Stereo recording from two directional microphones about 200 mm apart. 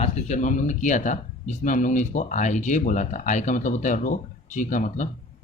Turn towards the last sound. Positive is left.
turn(degrees=40)  # may be behind; listen again after turning